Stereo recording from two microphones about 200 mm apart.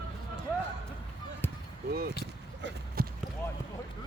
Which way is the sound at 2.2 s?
55° right (ahead or behind).